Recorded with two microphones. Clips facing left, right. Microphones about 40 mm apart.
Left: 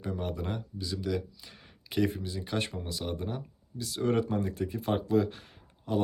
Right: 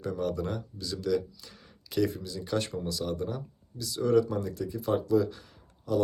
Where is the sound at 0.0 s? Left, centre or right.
Left.